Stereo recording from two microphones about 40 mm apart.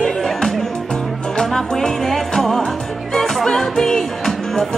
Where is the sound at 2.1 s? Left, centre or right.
Centre.